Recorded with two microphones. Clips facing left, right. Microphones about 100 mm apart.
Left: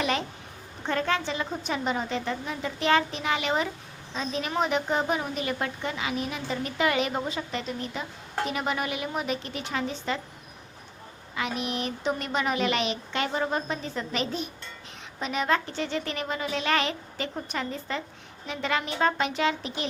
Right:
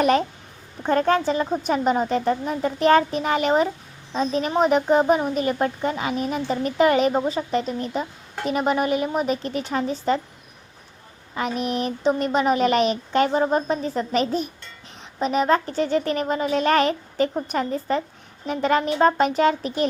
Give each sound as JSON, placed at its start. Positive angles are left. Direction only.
{"t": 0.0, "sound": "a child's voice", "side_deg": -45}
{"t": 11.3, "sound": "speech", "side_deg": -40}